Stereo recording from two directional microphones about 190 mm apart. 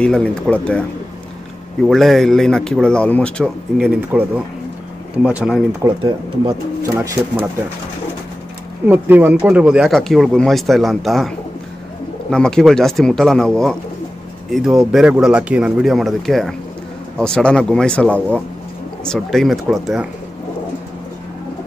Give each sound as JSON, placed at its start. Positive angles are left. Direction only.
{"t": 0.0, "sound": "speech", "side_deg": 5}
{"t": 1.9, "sound": "speech", "side_deg": 0}
{"t": 5.9, "sound": "speech", "side_deg": -20}
{"t": 8.8, "sound": "speech", "side_deg": -10}